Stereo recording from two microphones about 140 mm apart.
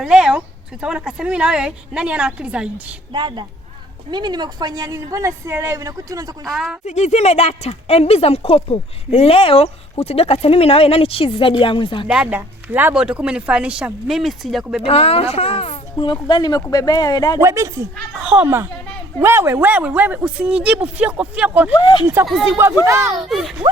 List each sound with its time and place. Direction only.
0.0 s a woman's voice: 5° right (ahead or behind)
3.1 s a woman's voice: 35° right (ahead or behind)
6.4 s speech: centre (ahead or behind)
6.8 s speech: 55° left (ahead or behind); by 12.0 s 35° left (ahead or behind)
12.0 s a woman's voice: 10° right (ahead or behind)
14.8 s speech: 45° left (ahead or behind)
16.2 s speech: 30° left (ahead or behind)
17.4 s a woman's voice: 20° right (ahead or behind)
21.8 s speech: 30° left (ahead or behind)
22.0 s a woman's voice: 15° right (ahead or behind)
23.3 s speech: centre (ahead or behind)